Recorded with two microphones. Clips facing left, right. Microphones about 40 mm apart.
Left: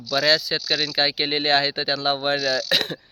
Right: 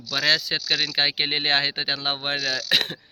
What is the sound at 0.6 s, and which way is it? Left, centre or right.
Speech, right.